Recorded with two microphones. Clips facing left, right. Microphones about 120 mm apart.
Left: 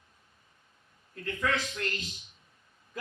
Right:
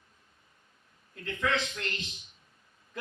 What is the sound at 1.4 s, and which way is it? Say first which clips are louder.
Speech: right 1 dB; 25° right (ahead or behind).